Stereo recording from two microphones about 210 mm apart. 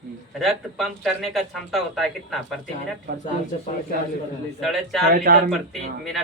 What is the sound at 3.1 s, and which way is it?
Speech, 55° right (ahead or behind).